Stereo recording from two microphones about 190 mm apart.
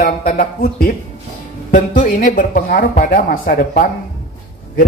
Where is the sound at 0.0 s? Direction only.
50° left (ahead or behind).